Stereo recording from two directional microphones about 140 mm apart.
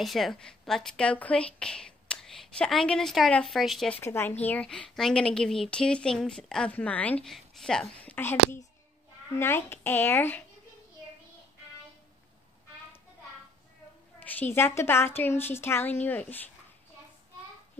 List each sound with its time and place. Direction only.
0.0 s speech: centre (ahead or behind)
4.0 s a woman's voice: 15° left (ahead or behind)
14.2 s a woman's voice: 10° left (ahead or behind)